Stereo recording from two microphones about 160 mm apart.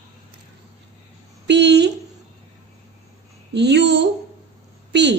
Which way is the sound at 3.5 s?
90° right.